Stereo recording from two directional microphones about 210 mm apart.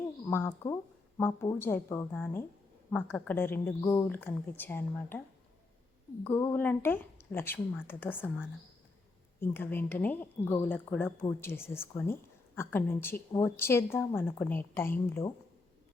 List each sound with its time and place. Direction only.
0.3 s a woman's voice: 10° left (ahead or behind)
6.2 s a woman's voice: 10° left (ahead or behind)